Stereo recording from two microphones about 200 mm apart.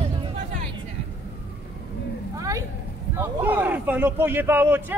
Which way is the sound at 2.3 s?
15° right (ahead or behind).